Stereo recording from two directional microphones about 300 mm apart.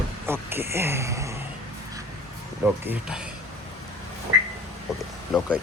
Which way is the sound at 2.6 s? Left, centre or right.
Centre.